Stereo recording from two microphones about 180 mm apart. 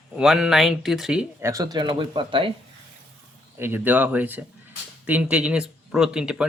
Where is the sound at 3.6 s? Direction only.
10° right (ahead or behind).